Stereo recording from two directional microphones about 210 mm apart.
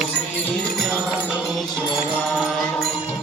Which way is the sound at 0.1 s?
5° left (ahead or behind).